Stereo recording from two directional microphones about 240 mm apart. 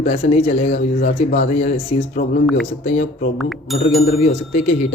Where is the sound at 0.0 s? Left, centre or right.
Left.